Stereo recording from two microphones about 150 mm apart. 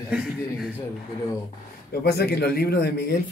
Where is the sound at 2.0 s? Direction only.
90° left.